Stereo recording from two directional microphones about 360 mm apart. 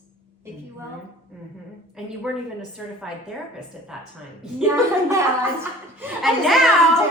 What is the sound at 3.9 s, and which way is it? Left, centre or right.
A child's voice, centre.